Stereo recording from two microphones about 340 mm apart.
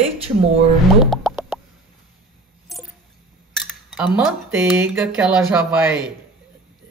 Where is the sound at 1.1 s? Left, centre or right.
Centre.